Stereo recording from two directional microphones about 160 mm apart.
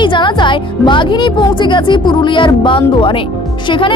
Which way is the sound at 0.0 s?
30° left (ahead or behind).